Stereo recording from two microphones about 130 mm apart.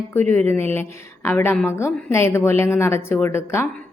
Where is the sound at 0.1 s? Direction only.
15° left (ahead or behind).